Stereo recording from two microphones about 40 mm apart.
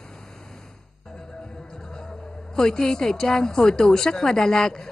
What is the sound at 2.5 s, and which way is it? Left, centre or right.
A woman's voice, centre.